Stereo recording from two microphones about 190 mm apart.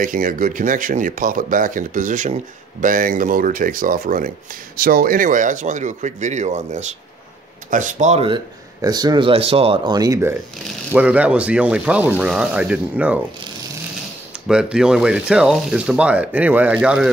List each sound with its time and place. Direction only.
0.0 s speech: 45° right (ahead or behind)
8.8 s speech: 20° right (ahead or behind)
10.9 s speech: 5° right (ahead or behind)
14.5 s speech: 5° right (ahead or behind)